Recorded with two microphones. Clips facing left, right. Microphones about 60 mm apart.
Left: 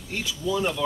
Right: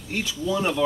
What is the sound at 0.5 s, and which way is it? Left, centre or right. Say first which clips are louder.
Speech: right 2 dB; right.